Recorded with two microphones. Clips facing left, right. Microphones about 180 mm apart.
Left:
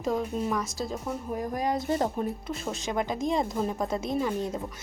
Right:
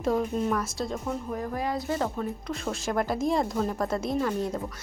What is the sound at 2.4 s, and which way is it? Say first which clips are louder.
Speech: right 2 dB; centre (ahead or behind).